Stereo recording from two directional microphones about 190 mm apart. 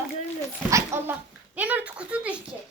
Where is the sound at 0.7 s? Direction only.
15° right (ahead or behind).